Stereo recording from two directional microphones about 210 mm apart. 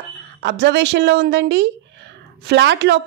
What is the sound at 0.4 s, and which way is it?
A woman's voice, 55° right (ahead or behind).